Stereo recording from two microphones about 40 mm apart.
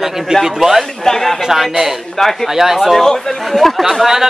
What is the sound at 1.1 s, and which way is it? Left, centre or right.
Speech, centre.